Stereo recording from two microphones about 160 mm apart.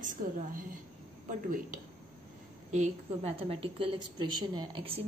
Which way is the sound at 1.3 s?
55° right (ahead or behind).